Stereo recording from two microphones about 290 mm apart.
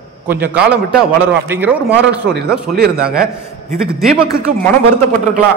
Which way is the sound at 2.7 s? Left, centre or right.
Right.